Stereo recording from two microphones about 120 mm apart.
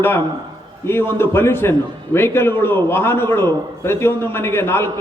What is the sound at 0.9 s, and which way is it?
A man's voice, 20° left (ahead or behind).